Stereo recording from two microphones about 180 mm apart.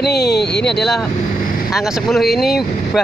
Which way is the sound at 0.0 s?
65° left (ahead or behind).